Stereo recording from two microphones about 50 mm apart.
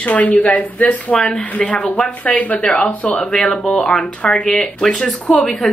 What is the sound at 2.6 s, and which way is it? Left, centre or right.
Speech, centre.